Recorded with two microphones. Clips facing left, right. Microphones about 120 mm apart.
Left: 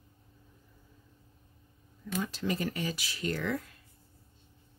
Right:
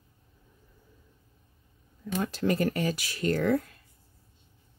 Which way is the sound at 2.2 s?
55° right (ahead or behind).